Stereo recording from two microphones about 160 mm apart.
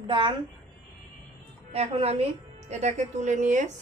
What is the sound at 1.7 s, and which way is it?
A woman's voice, 40° right (ahead or behind).